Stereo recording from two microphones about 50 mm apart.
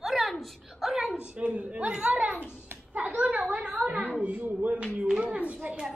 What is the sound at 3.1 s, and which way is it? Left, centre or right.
A woman's voice, right.